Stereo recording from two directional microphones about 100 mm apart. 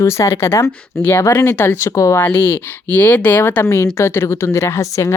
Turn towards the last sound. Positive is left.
turn(degrees=25)  # may be behind; listen again after turning